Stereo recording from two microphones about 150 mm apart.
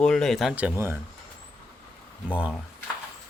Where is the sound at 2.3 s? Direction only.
10° right (ahead or behind).